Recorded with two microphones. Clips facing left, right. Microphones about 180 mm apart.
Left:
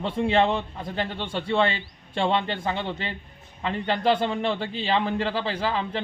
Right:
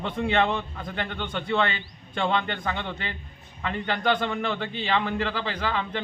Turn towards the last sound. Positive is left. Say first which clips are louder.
# left 2 dB
turn(degrees=30)  # may be behind; listen again after turning